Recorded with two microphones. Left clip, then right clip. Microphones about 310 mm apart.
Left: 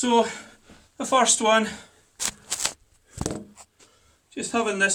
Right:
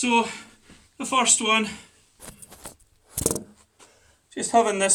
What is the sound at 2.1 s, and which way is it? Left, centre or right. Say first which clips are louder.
Shuffling cards: left 16 dB; left.